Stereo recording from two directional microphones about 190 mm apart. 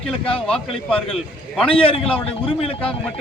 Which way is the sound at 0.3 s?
5° left (ahead or behind).